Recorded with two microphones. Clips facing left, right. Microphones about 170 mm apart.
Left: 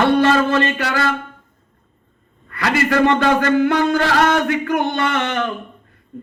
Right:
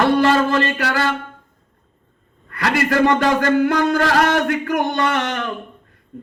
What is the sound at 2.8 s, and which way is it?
A man's voice, 50° right (ahead or behind).